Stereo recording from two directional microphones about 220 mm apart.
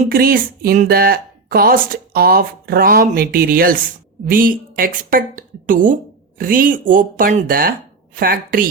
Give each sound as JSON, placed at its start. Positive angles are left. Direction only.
{"t": 0.1, "sound": "speech", "side_deg": -40}